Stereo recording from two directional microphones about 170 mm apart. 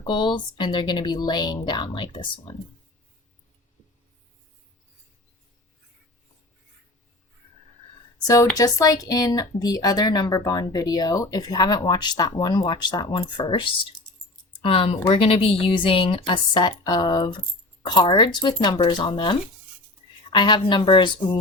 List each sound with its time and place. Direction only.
0.0 s speech: 25° left (ahead or behind)
8.5 s a woman's voice: 20° left (ahead or behind)